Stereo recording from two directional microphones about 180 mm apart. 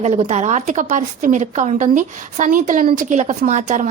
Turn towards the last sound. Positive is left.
turn(degrees=-40)  # may be behind; listen again after turning